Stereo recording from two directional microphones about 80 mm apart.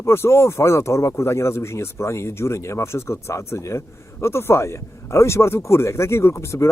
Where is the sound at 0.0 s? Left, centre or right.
Left.